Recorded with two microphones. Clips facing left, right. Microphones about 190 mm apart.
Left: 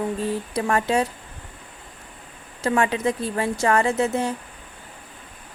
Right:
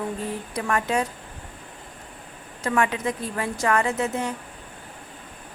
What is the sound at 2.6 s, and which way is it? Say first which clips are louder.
A woman's voice: left 3 dB; 30° left (ahead or behind).